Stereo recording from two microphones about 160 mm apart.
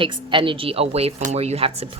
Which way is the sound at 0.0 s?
30° right (ahead or behind).